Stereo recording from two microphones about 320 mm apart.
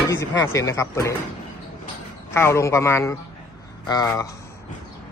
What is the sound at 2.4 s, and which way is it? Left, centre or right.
A man's voice, centre.